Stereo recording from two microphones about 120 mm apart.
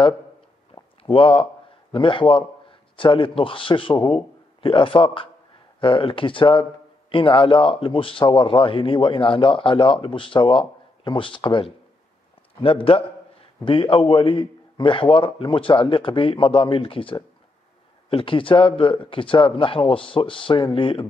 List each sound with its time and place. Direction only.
1.0 s a man's voice: 45° left (ahead or behind)